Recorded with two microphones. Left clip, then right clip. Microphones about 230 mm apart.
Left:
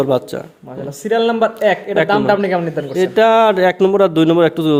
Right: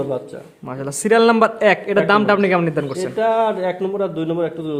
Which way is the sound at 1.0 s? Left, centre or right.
Right.